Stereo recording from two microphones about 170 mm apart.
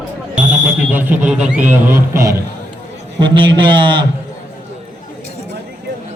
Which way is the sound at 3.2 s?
30° right (ahead or behind).